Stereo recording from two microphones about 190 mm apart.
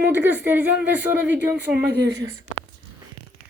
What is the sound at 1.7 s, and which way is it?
Speech, 60° right (ahead or behind).